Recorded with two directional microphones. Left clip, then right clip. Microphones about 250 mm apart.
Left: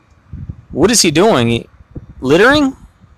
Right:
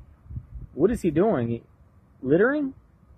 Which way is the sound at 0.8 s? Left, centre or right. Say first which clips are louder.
Left 11 dB; left.